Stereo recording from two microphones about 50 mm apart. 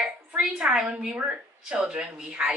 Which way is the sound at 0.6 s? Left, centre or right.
Centre.